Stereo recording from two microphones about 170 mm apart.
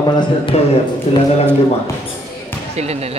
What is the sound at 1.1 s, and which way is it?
Speech, 40° left (ahead or behind).